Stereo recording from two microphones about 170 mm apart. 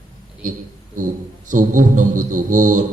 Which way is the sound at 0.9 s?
50° right (ahead or behind).